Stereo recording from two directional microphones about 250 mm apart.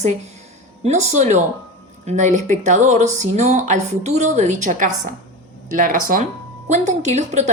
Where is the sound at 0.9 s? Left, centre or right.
Right.